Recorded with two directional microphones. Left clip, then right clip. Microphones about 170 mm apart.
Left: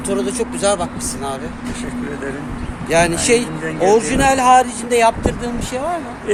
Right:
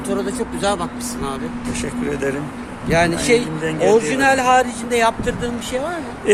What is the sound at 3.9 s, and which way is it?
Speech, 30° left (ahead or behind).